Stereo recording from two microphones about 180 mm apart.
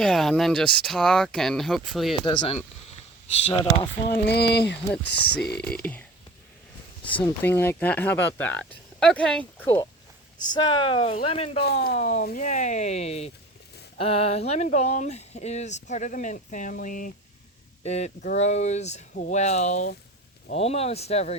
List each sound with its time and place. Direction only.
0.0 s speech: centre (ahead or behind)
2.2 s speech: 25° left (ahead or behind)
4.3 s speech: 65° left (ahead or behind)
5.6 s speech: 5° left (ahead or behind)
7.3 s speech: 10° left (ahead or behind)
10.3 s speech: 25° left (ahead or behind)
11.6 s speech: 60° left (ahead or behind)
11.9 s speech: 45° left (ahead or behind)